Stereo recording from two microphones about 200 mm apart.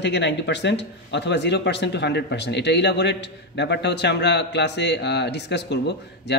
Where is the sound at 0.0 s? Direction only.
60° left (ahead or behind).